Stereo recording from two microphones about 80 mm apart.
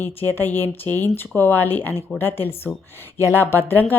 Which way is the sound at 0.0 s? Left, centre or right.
Left.